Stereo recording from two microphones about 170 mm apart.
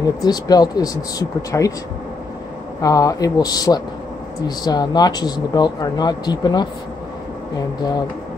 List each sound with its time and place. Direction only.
0.0 s speech: 25° left (ahead or behind)
2.8 s speech: 20° left (ahead or behind)